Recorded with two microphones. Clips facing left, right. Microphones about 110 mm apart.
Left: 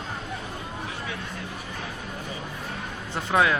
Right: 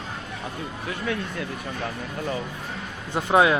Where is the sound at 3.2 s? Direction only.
20° right (ahead or behind).